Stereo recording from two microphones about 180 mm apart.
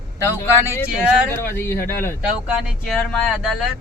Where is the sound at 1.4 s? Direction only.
10° left (ahead or behind).